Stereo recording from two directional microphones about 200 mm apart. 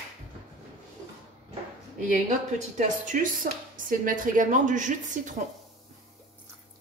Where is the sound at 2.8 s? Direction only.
40° right (ahead or behind).